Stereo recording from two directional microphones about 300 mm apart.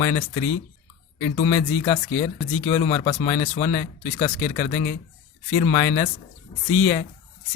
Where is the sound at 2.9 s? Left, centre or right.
Centre.